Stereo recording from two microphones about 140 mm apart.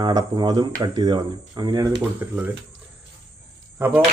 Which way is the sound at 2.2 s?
15° right (ahead or behind).